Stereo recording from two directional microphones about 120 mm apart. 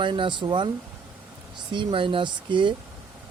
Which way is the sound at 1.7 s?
45° right (ahead or behind).